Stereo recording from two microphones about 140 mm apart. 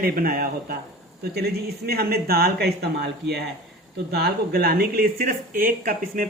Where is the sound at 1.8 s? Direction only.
90° right.